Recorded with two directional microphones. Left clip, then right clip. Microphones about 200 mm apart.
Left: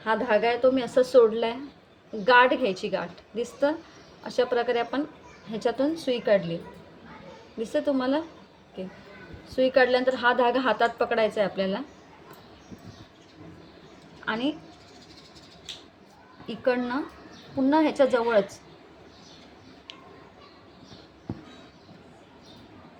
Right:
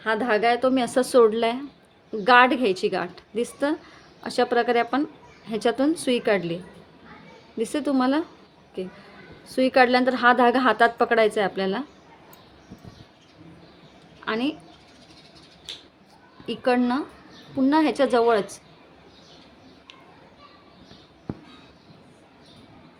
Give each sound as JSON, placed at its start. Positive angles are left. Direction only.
{"t": 0.0, "sound": "a woman's voice", "side_deg": -55}
{"t": 7.6, "sound": "a woman's voice", "side_deg": -60}
{"t": 14.3, "sound": "a woman's voice", "side_deg": -55}
{"t": 16.5, "sound": "a woman's voice", "side_deg": -50}